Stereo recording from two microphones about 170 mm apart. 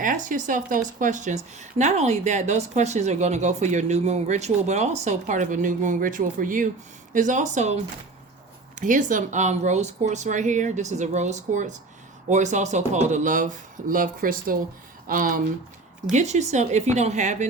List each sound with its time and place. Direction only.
0.0 s speech: 50° right (ahead or behind)